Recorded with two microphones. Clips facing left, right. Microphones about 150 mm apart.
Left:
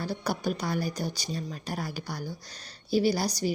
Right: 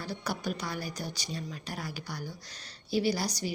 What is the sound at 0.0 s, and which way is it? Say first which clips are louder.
Speech: left 5 dB; 35° left (ahead or behind).